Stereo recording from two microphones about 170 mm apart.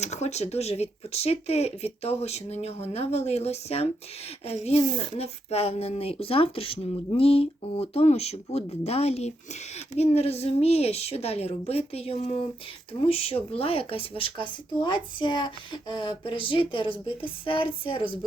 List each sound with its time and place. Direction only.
0.0 s speech: 40° left (ahead or behind)